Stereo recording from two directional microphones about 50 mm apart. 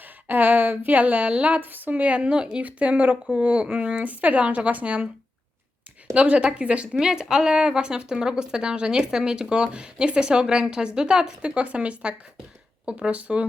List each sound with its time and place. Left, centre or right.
0.0 s speech: right
1.6 s a woman's voice: right
2.0 s speech: right
6.1 s a woman's voice: right